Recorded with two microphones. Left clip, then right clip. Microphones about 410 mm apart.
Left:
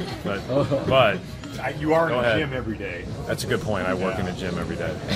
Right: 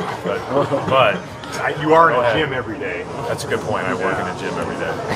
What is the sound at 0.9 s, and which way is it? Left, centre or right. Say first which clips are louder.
Speech: right 3 dB; left.